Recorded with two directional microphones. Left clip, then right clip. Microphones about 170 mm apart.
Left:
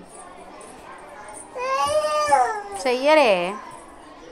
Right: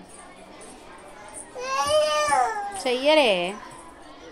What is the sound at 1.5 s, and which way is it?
Child singing, 30° right (ahead or behind).